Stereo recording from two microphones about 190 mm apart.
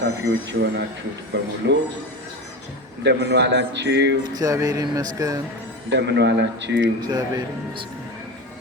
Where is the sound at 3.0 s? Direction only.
65° right (ahead or behind).